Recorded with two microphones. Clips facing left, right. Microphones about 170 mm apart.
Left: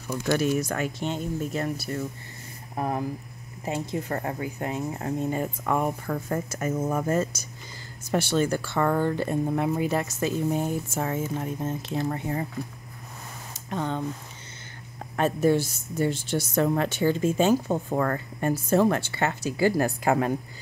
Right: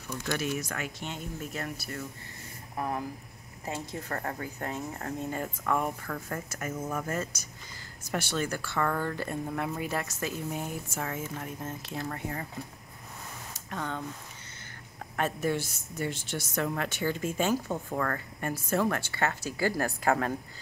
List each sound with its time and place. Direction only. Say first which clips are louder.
0.1 s a woman's voice: left 8 dB; 40° left (ahead or behind)
13.5 s a sound: left 6 dB; 25° left (ahead or behind)
15.1 s a woman's voice: left 7 dB; 30° left (ahead or behind)